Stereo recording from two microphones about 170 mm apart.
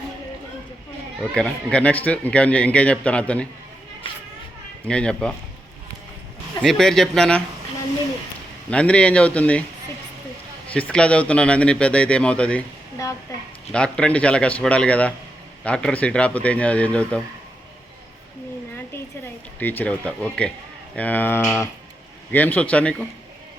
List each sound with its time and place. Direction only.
1.2 s speech: 5° left (ahead or behind)
4.9 s a man's voice: 5° left (ahead or behind)
6.6 s a man's voice: centre (ahead or behind)
8.7 s speech: 5° left (ahead or behind)
10.7 s speech: 10° left (ahead or behind)
13.7 s speech: 5° left (ahead or behind)
19.5 s speech: 10° left (ahead or behind)